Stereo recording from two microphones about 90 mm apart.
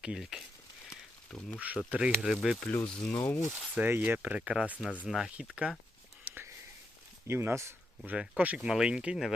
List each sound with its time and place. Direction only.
0.0 s speech: 10° right (ahead or behind)
0.9 s a sound: 10° left (ahead or behind)
1.5 s speech: 15° right (ahead or behind)
2.6 s speech: 15° left (ahead or behind)
3.5 s speech: 25° right (ahead or behind)
5.0 s speech: 5° right (ahead or behind)
6.2 s a sound: 20° right (ahead or behind)
7.3 s speech: 30° right (ahead or behind)
8.0 s speech: 15° right (ahead or behind)